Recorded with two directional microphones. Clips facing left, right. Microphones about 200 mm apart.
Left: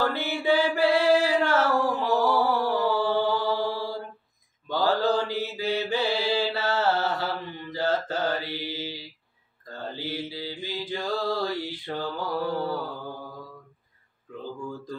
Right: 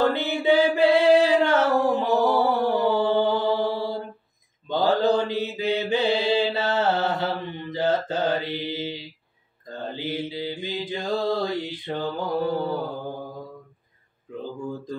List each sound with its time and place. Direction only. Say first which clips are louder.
0.0 s singing: right 4 dB; 20° right (ahead or behind)
4.6 s mantra: right 3 dB; 20° right (ahead or behind)
14.4 s a sound: right 3 dB; 20° right (ahead or behind)